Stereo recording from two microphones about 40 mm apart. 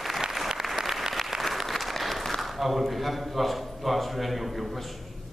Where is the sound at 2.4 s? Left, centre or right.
Centre.